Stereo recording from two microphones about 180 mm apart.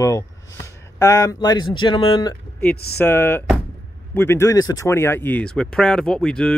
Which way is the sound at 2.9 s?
10° left (ahead or behind).